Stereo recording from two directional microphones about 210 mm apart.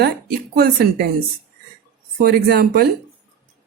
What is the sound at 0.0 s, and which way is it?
Speech, 45° right (ahead or behind).